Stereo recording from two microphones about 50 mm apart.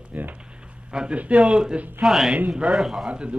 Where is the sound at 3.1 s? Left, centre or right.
Right.